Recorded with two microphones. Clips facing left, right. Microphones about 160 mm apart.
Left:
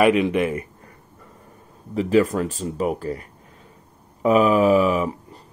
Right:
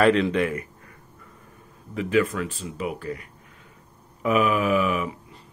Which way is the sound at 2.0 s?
35° left (ahead or behind).